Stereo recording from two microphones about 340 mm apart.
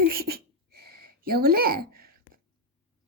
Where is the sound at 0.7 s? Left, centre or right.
Right.